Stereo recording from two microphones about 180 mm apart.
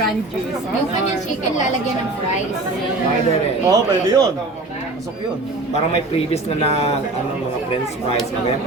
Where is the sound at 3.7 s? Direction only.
25° right (ahead or behind).